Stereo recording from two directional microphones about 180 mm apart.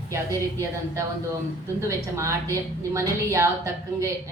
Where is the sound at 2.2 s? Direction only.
15° right (ahead or behind).